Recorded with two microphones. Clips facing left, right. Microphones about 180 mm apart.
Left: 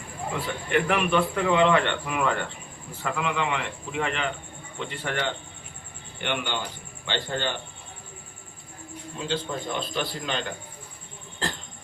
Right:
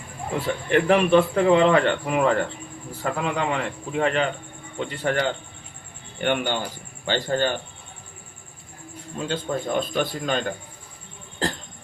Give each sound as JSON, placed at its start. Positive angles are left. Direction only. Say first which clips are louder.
{"t": 0.7, "sound": "a man's voice", "louder": "right 6 dB", "side_deg": -35}
{"t": 9.1, "sound": "a man's voice", "louder": "right 3 dB", "side_deg": -50}